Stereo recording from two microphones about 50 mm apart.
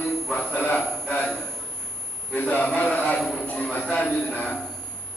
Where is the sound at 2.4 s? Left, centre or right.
Left.